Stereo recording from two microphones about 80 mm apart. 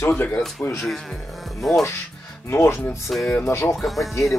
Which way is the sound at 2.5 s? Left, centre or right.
Left.